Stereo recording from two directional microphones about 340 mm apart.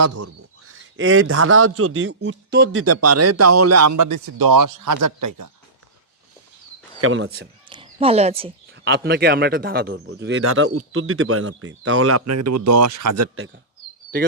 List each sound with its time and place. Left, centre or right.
0.0 s a man's voice: right
7.0 s a man's voice: right
7.7 s speech: centre
8.7 s a man's voice: right